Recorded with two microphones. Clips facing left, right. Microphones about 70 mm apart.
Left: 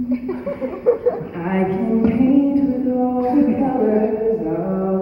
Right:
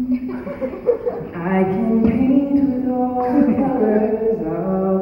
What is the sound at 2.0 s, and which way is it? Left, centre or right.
Music, centre.